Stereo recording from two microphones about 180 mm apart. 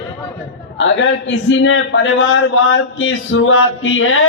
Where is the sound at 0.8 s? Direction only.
90° left.